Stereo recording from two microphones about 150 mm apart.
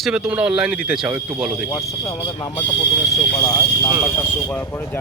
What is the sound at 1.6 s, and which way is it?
Speech, 20° left (ahead or behind).